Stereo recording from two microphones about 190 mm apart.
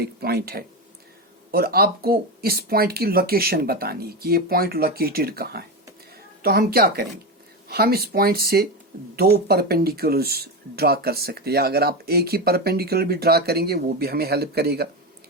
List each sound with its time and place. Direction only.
0.0 s speech: 55° right (ahead or behind)